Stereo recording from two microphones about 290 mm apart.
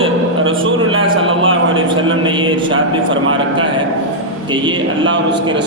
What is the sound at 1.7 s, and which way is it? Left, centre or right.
A man's voice, centre.